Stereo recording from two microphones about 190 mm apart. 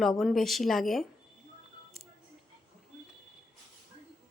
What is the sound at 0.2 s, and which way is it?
Speech, centre (ahead or behind).